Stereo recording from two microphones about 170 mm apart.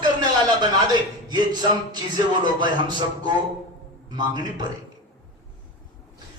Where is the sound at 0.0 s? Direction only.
25° right (ahead or behind).